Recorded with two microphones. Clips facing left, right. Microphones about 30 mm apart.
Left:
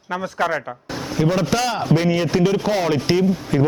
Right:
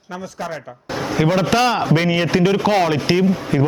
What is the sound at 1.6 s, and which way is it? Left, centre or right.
Speech, right.